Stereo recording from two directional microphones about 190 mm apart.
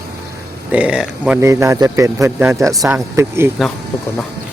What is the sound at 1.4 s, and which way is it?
Speech, 15° right (ahead or behind).